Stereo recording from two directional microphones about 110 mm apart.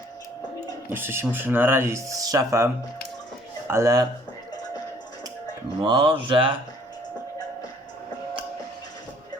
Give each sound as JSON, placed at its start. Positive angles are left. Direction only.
{"t": 0.9, "sound": "speech", "side_deg": -20}
{"t": 3.7, "sound": "speech", "side_deg": -25}
{"t": 5.8, "sound": "speech", "side_deg": -50}